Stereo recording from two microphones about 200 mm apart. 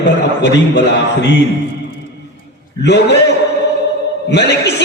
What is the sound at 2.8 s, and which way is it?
Speech, 60° left (ahead or behind).